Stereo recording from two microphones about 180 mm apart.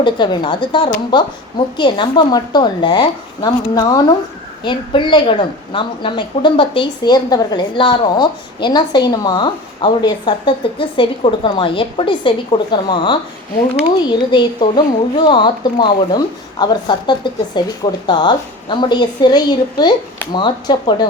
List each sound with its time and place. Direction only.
0.0 s a woman's voice: 25° left (ahead or behind)